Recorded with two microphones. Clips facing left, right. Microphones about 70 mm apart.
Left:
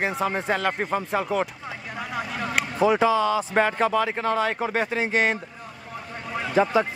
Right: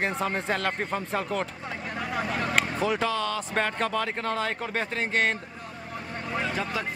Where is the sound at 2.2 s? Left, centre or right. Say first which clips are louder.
Even; centre.